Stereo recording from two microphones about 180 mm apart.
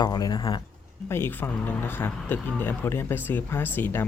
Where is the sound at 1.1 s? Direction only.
15° left (ahead or behind).